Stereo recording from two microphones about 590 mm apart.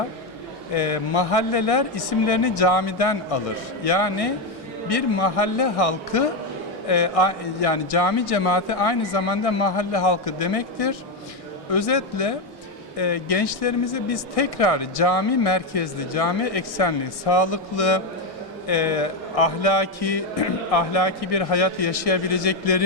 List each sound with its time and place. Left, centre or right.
0.7 s a man's voice: left